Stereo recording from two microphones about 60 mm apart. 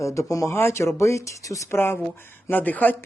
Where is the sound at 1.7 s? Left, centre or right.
Left.